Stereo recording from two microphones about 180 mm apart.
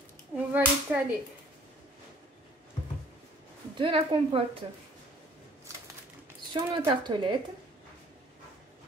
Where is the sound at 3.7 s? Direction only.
30° right (ahead or behind).